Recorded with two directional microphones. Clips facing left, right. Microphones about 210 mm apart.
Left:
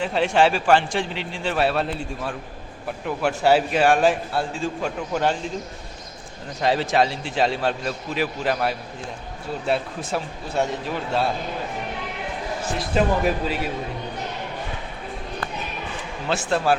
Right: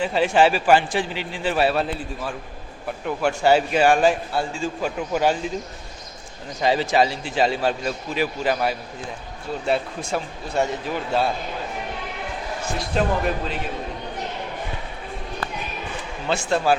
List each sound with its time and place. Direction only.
0.0 s a man's voice: centre (ahead or behind)
6.6 s a man's voice: centre (ahead or behind)
12.7 s a man's voice: centre (ahead or behind)
16.2 s a man's voice: centre (ahead or behind)